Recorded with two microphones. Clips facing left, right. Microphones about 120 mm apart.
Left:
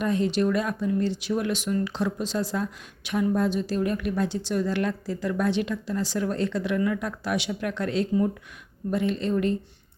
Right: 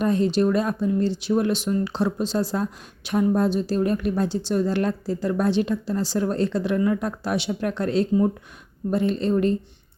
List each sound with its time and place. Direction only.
0.0 s speech: 35° right (ahead or behind)